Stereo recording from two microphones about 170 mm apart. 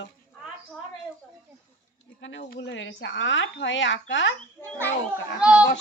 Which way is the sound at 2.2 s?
90° left.